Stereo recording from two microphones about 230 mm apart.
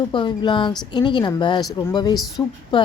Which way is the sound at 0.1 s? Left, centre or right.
Left.